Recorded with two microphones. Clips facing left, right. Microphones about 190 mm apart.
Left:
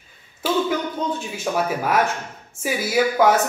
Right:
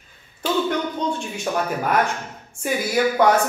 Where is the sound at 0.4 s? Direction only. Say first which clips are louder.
Left 1 dB; 5° left (ahead or behind).